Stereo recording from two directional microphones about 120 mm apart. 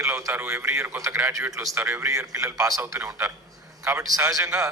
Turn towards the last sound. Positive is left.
turn(degrees=-25)  # may be behind; listen again after turning